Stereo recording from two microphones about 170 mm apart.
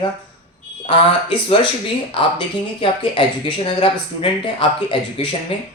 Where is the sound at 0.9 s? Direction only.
30° left (ahead or behind).